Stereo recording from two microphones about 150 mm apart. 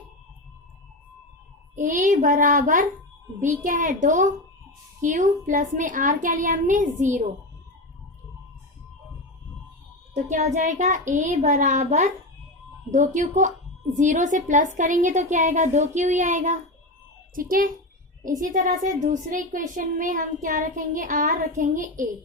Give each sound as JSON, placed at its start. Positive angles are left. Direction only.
{"t": 1.7, "sound": "a woman's voice", "side_deg": -60}
{"t": 10.2, "sound": "a child's voice", "side_deg": -50}
{"t": 13.1, "sound": "a woman's voice", "side_deg": -55}
{"t": 17.3, "sound": "a child's voice", "side_deg": -70}